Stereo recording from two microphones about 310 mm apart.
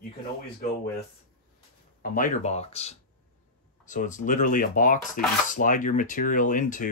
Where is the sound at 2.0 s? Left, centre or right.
Left.